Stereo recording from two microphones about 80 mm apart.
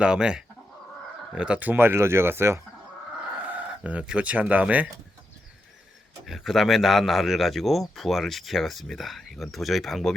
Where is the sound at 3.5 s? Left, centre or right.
Centre.